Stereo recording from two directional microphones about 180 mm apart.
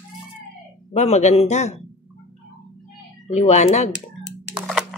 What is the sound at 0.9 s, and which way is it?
Speech, 40° left (ahead or behind).